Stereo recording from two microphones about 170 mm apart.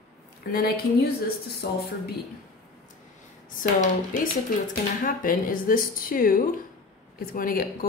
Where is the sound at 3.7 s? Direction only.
50° left (ahead or behind).